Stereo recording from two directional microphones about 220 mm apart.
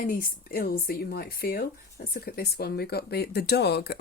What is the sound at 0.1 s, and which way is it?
Speech, 40° left (ahead or behind).